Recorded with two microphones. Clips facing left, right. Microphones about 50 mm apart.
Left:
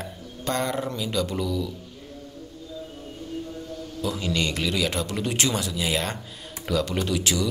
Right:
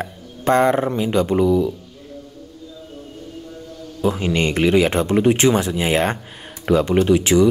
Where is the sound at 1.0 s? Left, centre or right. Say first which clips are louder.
Right 10 dB; right.